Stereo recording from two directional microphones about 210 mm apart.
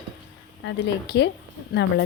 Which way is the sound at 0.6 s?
55° left (ahead or behind).